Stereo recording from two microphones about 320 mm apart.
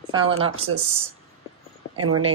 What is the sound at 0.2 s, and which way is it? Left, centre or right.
Speech, centre.